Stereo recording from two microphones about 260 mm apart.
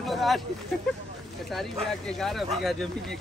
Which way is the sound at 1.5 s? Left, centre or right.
Centre.